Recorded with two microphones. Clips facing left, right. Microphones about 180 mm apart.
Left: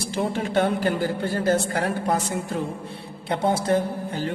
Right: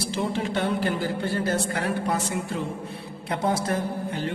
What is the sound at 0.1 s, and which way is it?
A man's voice, 50° left (ahead or behind).